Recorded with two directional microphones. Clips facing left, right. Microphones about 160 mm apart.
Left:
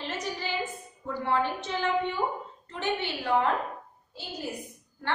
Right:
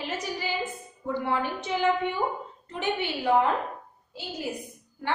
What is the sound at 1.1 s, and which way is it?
A woman's voice, 15° right (ahead or behind).